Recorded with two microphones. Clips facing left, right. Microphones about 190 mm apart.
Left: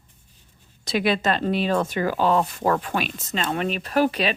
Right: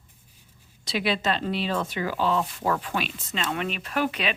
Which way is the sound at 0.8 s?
50° left (ahead or behind).